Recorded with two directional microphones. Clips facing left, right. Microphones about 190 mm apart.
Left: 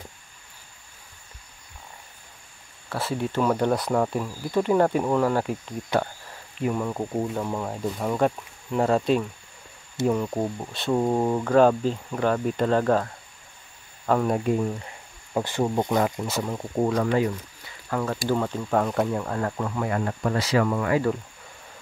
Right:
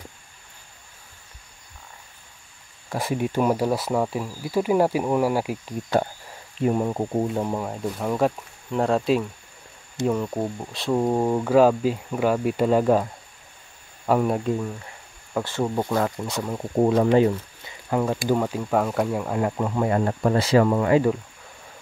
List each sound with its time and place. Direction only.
2.9 s speech: 15° right (ahead or behind)
6.6 s speech: 30° right (ahead or behind)
7.6 s speech: centre (ahead or behind)
15.3 s speech: 15° left (ahead or behind)
16.2 s speech: 5° left (ahead or behind)
16.5 s speech: 20° right (ahead or behind)
19.7 s speech: 25° right (ahead or behind)